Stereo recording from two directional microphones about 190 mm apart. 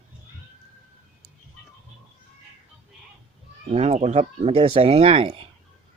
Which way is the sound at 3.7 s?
35° right (ahead or behind).